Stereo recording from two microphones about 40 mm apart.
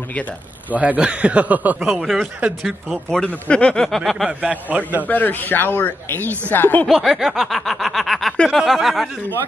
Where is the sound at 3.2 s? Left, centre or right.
Left.